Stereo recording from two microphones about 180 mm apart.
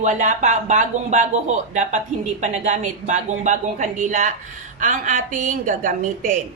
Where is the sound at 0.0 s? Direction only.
45° right (ahead or behind).